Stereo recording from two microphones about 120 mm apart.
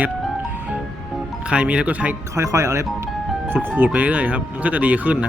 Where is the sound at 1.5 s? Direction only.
10° right (ahead or behind).